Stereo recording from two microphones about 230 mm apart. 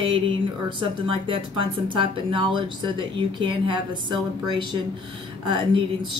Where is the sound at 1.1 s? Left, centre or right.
Right.